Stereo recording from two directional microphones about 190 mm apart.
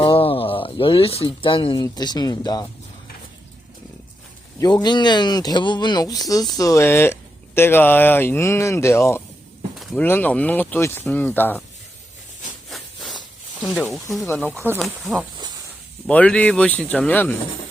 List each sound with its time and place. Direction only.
0.0 s speech: 30° left (ahead or behind)
4.6 s speech: 20° left (ahead or behind)
9.7 s a sound: centre (ahead or behind)
10.1 s speech: 10° left (ahead or behind)
13.6 s speech: 5° left (ahead or behind)